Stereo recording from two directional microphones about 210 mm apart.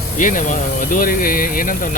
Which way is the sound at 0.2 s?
40° left (ahead or behind).